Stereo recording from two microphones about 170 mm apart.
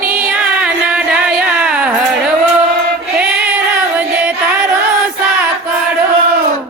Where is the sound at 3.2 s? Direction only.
10° right (ahead or behind).